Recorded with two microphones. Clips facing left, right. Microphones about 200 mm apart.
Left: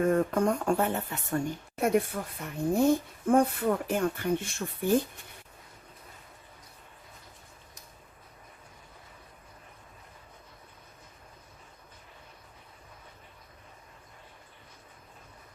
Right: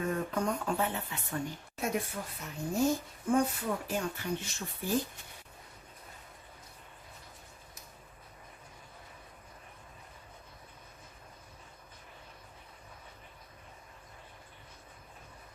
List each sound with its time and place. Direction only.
0.0 s speech: 50° left (ahead or behind)